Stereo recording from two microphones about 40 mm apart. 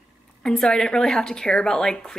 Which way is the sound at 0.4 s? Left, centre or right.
Centre.